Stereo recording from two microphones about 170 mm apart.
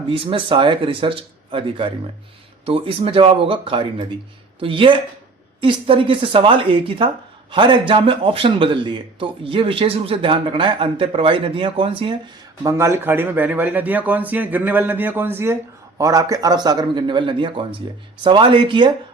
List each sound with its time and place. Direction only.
0.1 s a man's voice: 30° right (ahead or behind)
12.6 s a man's voice: 15° right (ahead or behind)